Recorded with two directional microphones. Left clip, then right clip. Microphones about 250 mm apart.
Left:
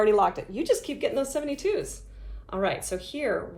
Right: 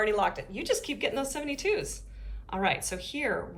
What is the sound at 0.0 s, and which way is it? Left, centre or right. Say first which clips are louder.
Speech: left 5 dB; left.